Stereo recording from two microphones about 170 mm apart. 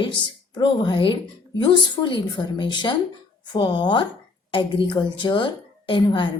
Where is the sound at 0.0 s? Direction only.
30° left (ahead or behind).